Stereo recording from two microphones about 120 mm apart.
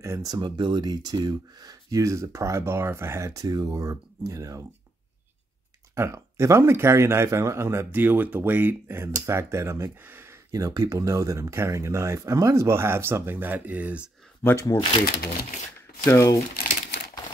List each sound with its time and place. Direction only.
0.0 s speech: 30° right (ahead or behind)
5.9 s speech: 25° right (ahead or behind)
14.4 s speech: 15° left (ahead or behind)
16.1 s speech: 25° left (ahead or behind)